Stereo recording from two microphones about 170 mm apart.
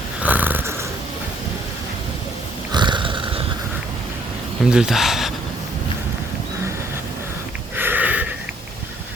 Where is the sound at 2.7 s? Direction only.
25° right (ahead or behind).